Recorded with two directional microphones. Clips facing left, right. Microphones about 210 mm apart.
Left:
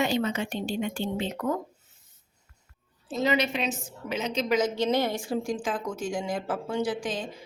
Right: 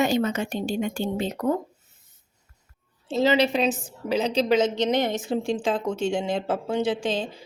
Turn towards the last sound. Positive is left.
turn(degrees=-25)  # may be behind; listen again after turning